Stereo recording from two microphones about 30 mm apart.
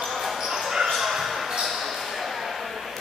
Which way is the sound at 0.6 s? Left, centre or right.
Centre.